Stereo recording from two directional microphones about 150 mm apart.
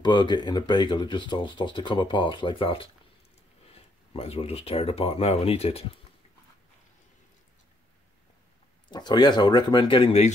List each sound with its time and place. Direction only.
0.0 s speech: 30° left (ahead or behind)
8.9 s speech: 30° left (ahead or behind)